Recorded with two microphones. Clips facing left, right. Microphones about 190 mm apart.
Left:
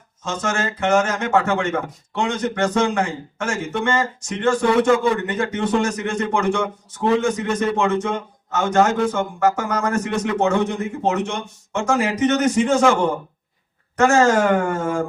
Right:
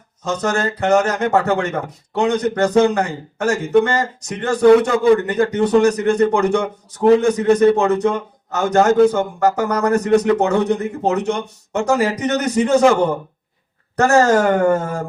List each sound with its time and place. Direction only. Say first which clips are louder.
0.3 s a man's voice: right 4 dB; 35° right (ahead or behind)